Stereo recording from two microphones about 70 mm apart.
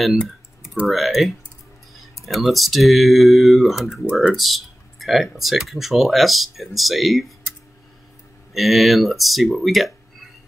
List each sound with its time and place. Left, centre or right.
0.8 s speech: centre
4.0 s speech: centre
4.3 s speech: centre
8.5 s speech: centre